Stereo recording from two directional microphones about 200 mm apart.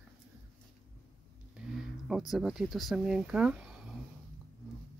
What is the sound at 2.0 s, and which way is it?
Speech, centre (ahead or behind).